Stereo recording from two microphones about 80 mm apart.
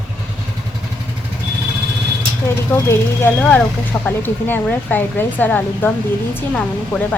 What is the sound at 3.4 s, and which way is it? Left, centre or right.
Speech, centre.